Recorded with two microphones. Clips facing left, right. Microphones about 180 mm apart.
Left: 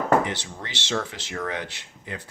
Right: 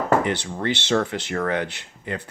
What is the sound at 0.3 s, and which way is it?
Speech, 60° right (ahead or behind).